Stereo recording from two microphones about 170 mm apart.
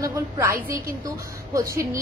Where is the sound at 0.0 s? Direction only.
20° right (ahead or behind).